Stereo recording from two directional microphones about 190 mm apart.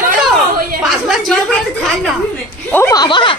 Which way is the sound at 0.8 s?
Centre (ahead or behind).